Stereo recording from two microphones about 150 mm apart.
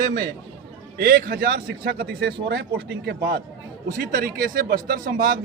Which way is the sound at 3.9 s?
70° right (ahead or behind).